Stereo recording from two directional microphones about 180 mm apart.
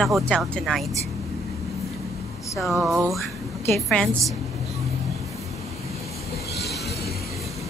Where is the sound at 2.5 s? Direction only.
Centre (ahead or behind).